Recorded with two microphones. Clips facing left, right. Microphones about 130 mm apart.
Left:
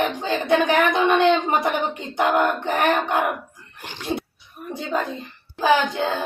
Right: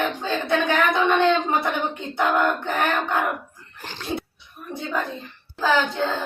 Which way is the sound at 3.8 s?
15° left (ahead or behind).